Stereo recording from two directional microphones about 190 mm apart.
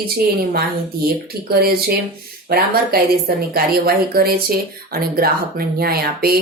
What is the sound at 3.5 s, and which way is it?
Speech, 50° right (ahead or behind).